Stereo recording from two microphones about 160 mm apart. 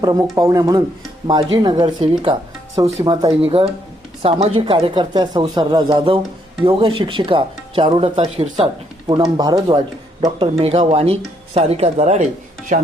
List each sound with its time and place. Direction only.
0.0 s speech: 25° right (ahead or behind)
3.4 s speech: 35° right (ahead or behind)